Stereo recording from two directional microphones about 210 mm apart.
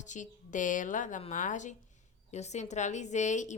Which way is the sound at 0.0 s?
35° left (ahead or behind).